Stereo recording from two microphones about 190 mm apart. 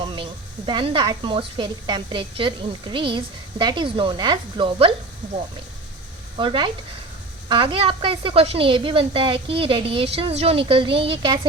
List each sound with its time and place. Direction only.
0.0 s a woman's voice: 25° right (ahead or behind)
6.3 s a woman's voice: 25° right (ahead or behind)